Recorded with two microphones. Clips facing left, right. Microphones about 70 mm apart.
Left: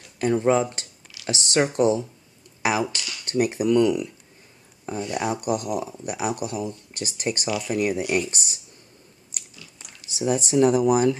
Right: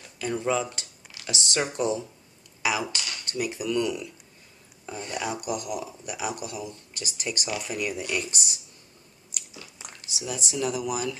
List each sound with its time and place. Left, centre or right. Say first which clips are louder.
0.2 s speech: left 7 dB; left
2.9 s speech: even; right
3.3 s speech: left 9 dB; left
3.6 s speech: left 8 dB; left
10.1 s speech: left 11 dB; left